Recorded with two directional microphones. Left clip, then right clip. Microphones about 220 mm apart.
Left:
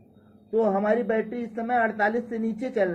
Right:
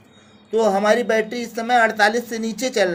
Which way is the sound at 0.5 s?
15° right (ahead or behind).